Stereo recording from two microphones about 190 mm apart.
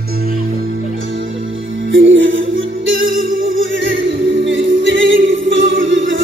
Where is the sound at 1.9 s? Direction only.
85° right.